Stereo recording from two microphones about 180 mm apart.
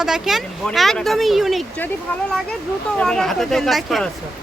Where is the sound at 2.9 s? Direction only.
5° left (ahead or behind).